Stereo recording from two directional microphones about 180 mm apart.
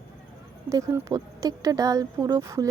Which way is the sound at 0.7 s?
20° right (ahead or behind).